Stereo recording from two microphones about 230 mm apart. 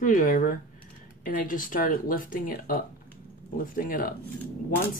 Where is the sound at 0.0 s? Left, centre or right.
Left.